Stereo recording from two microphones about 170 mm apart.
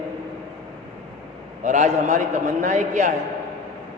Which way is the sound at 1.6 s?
45° right (ahead or behind).